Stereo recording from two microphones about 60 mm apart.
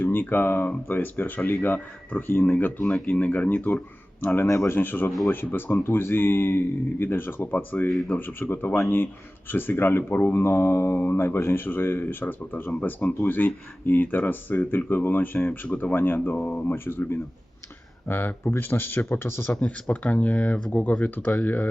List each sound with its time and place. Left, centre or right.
0.0 s speech: left
7.9 s speech: centre
8.1 s speech: left
10.4 s speech: left
15.6 s speech: left
15.9 s speech: left
16.4 s speech: left
16.6 s speech: left
19.5 s speech: left